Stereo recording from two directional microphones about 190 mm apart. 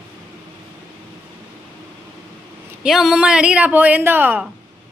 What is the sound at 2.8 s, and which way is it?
A woman's voice, centre (ahead or behind).